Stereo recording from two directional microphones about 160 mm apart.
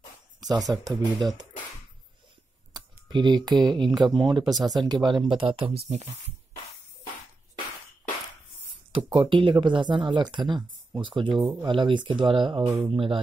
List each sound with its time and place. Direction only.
0.4 s speech: 25° right (ahead or behind)
2.7 s speech: 25° right (ahead or behind); by 6.0 s 45° right (ahead or behind)
8.9 s speech: 35° right (ahead or behind)